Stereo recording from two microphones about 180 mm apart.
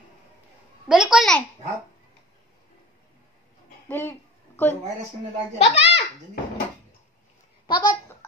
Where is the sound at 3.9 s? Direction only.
10° left (ahead or behind).